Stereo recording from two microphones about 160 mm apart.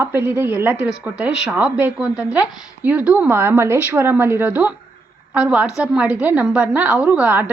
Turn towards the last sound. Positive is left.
turn(degrees=-10)  # may be behind; listen again after turning